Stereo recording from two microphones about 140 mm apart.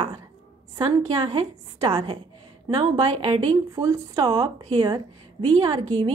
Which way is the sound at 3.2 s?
40° right (ahead or behind).